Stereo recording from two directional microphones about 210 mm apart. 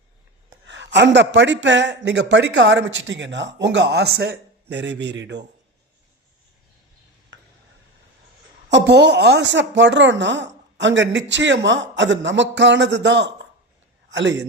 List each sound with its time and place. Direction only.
0.6 s a man's voice: 60° right (ahead or behind)
7.3 s a sound: 65° right (ahead or behind)
8.7 s a man's voice: 55° right (ahead or behind)